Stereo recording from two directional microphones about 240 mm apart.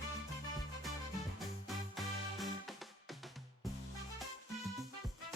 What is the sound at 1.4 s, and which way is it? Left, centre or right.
Music, centre.